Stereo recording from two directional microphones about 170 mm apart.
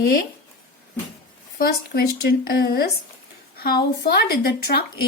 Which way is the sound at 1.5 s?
60° left (ahead or behind).